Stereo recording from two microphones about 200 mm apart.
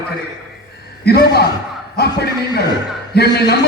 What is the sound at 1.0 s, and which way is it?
A man's voice, 55° left (ahead or behind).